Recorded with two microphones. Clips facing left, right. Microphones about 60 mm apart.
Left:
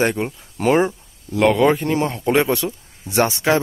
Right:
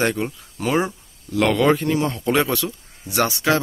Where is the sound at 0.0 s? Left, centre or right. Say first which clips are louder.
Left 2 dB; left.